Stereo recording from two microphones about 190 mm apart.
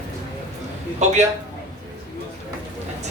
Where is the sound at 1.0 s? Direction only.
35° right (ahead or behind).